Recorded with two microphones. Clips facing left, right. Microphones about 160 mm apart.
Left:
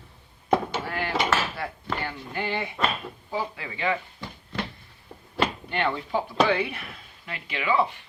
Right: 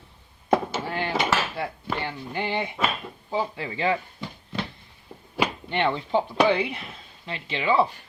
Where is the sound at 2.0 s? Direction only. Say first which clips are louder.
Right 1 dB; 20° right (ahead or behind).